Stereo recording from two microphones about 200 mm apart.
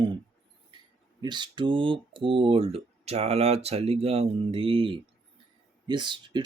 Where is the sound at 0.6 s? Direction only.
20° right (ahead or behind).